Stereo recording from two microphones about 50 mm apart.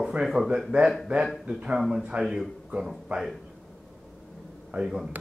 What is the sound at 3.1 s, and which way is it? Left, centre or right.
Speech, right.